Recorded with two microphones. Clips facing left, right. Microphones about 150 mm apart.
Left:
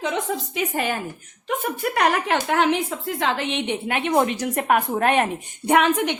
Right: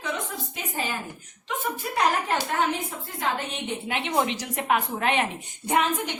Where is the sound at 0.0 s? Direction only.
80° left.